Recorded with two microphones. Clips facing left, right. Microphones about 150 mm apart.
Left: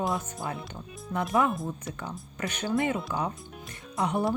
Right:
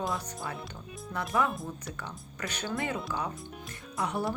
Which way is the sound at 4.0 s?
20° left (ahead or behind).